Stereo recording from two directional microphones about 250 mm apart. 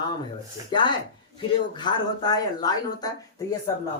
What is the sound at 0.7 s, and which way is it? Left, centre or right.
Speech, centre.